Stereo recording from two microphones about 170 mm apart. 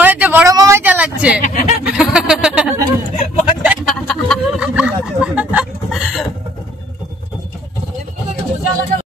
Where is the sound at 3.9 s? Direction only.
Centre (ahead or behind).